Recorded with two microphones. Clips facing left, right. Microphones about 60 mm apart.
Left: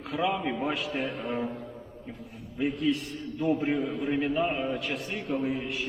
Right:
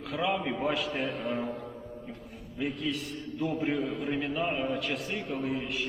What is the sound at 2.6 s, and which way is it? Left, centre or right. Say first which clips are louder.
A man's voice: left 5 dB; centre.